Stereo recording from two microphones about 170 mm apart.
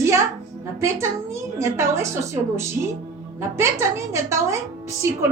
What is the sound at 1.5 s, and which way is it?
A woman's voice, 15° right (ahead or behind).